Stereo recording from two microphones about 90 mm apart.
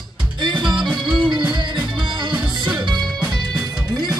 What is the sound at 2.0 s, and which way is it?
Music, 60° right (ahead or behind).